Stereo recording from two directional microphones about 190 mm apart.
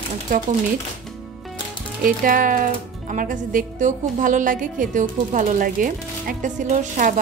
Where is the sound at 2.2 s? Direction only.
45° right (ahead or behind).